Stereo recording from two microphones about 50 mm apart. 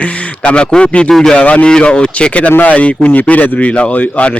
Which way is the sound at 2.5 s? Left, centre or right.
Left.